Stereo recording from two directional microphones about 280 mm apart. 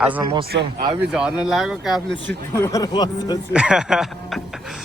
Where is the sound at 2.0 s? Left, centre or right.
Right.